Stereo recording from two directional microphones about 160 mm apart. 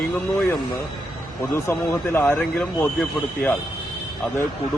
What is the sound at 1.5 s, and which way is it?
Speech, 15° left (ahead or behind).